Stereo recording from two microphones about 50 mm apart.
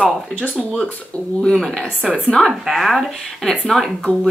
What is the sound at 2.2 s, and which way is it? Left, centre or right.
Speech, centre.